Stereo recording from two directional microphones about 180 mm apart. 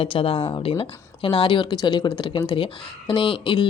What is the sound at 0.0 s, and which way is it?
Speech, 30° left (ahead or behind).